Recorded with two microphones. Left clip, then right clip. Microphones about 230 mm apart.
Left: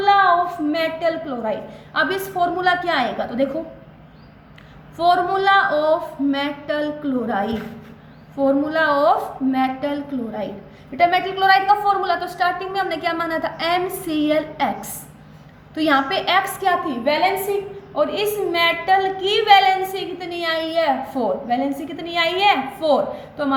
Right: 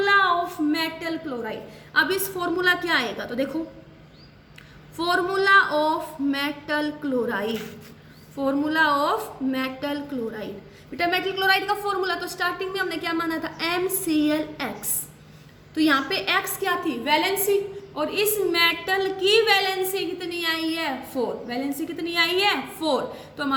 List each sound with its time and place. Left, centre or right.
0.0 s a woman's voice: centre
4.9 s a woman's voice: centre